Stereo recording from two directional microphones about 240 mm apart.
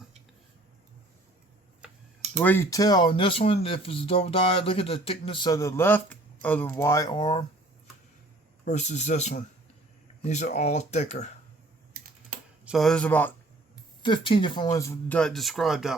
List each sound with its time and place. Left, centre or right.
2.4 s speech: centre
8.6 s speech: left
12.6 s speech: centre
14.0 s speech: left; by 16.0 s centre